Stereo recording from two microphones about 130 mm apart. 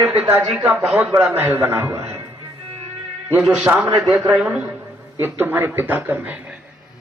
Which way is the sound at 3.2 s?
10° right (ahead or behind).